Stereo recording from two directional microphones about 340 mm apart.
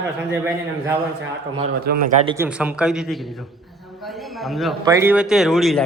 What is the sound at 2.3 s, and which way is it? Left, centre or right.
Speech, centre.